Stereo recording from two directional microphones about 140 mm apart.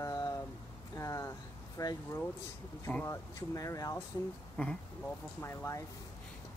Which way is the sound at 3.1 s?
25° left (ahead or behind).